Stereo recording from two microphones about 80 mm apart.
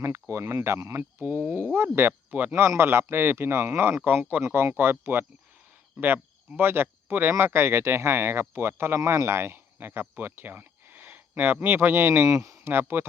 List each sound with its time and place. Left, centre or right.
0.0 s speech: right
12.3 s speech: right
12.6 s speech: right